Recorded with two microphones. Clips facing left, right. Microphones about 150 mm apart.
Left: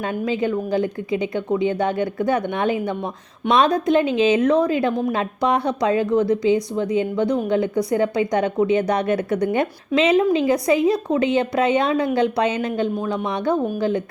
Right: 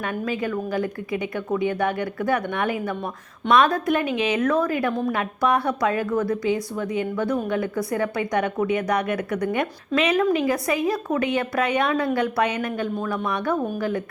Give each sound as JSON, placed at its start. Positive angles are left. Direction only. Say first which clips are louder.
{"t": 0.0, "sound": "a woman's voice", "louder": "left 4 dB", "side_deg": 25}